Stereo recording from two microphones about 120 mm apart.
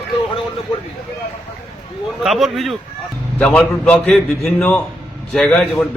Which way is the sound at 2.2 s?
5° right (ahead or behind).